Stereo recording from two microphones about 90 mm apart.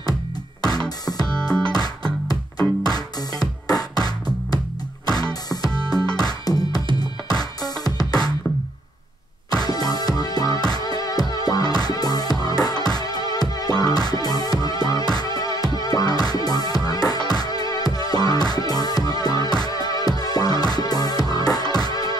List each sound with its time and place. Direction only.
0.6 s music: 45° left (ahead or behind)
2.8 s music: 45° left (ahead or behind)
9.5 s music: 45° left (ahead or behind)